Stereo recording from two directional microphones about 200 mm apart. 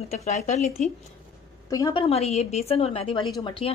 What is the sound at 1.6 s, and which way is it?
A woman's voice, 20° left (ahead or behind).